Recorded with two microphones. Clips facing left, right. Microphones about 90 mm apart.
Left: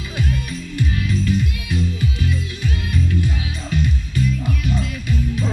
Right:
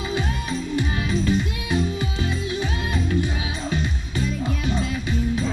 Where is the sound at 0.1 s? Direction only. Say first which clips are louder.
Left 3 dB; 30° right (ahead or behind).